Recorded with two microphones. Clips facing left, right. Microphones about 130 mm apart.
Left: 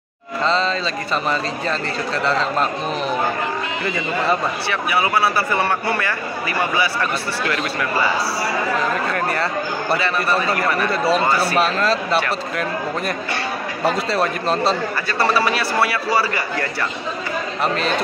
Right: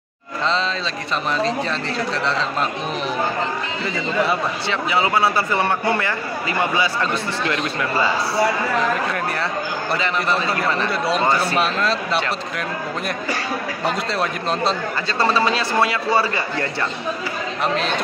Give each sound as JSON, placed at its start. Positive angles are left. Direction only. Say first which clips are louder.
{"t": 1.3, "sound": "a man's voice", "louder": "right 1 dB", "side_deg": 0}
{"t": 4.6, "sound": "a man's voice", "louder": "right 1 dB", "side_deg": -20}
{"t": 9.1, "sound": "a man's voice", "louder": "left 2 dB", "side_deg": 0}
{"t": 13.8, "sound": "a man's voice", "louder": "left 4 dB", "side_deg": 0}
{"t": 15.1, "sound": "a man's voice", "louder": "even", "side_deg": -20}
{"t": 17.7, "sound": "a man's voice", "louder": "left 1 dB", "side_deg": 0}